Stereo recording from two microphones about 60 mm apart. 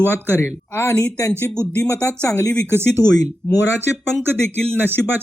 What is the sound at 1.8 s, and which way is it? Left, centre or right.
Speech, left.